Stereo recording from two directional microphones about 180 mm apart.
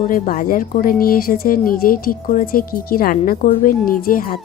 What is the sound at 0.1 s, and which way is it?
Speech, 50° left (ahead or behind).